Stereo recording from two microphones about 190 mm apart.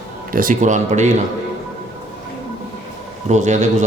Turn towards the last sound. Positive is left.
turn(degrees=-40)  # may be behind; listen again after turning